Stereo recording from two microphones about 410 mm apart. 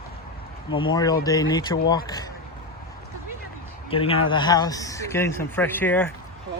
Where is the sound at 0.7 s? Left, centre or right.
Centre.